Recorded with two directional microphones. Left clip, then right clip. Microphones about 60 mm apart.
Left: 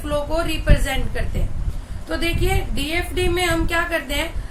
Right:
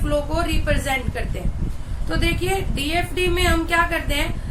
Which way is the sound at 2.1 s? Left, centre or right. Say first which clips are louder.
Even; left.